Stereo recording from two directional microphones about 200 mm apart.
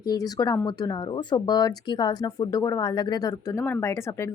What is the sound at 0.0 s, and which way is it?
Speech, 20° left (ahead or behind).